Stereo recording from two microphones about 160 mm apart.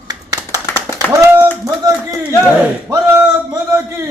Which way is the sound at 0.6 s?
20° left (ahead or behind).